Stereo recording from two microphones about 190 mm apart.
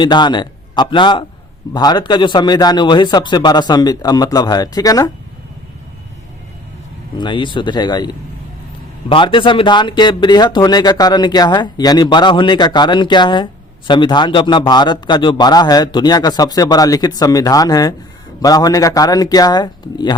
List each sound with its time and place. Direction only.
0.0 s speech: 25° left (ahead or behind)
7.2 s speech: 25° left (ahead or behind)